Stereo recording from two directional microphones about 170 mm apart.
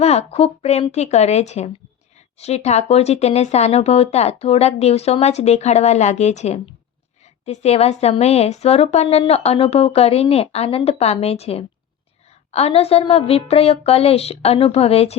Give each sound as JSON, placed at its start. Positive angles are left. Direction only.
{"t": 0.0, "sound": "speech", "side_deg": 40}